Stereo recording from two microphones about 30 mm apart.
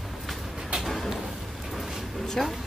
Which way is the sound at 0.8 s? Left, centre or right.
Centre.